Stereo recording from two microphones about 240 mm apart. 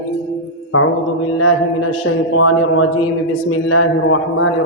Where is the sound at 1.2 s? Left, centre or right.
Left.